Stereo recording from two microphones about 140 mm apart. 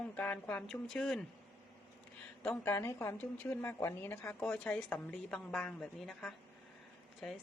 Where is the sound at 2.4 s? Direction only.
10° left (ahead or behind).